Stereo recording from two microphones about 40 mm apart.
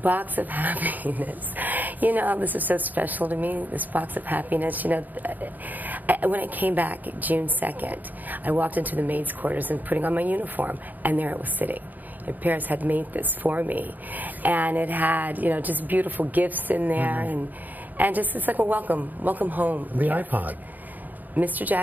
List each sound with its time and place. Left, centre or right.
0.0 s speech: right